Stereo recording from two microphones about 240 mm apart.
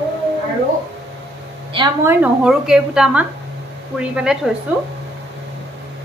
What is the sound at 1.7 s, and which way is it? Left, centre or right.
Speech, centre.